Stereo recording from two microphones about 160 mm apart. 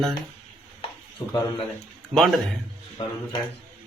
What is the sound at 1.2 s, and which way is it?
Speech, 20° left (ahead or behind).